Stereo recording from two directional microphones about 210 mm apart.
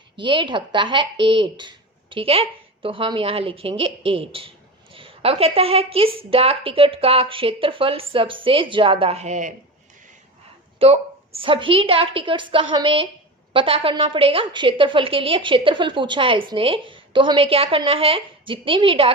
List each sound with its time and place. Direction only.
0.2 s a woman's voice: 20° right (ahead or behind)
10.8 s a woman's voice: 25° right (ahead or behind)